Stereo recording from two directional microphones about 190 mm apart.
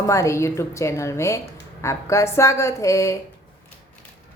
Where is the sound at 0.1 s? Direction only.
15° left (ahead or behind).